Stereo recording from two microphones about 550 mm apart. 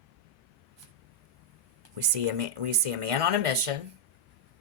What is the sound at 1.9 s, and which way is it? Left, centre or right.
Speech, right.